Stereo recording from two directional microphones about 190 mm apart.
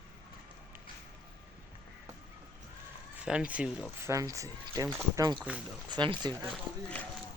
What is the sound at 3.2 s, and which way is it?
Speech, 5° right (ahead or behind).